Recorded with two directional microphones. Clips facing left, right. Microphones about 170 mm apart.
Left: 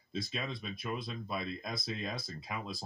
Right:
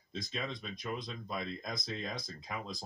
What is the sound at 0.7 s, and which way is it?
Speech, 5° left (ahead or behind).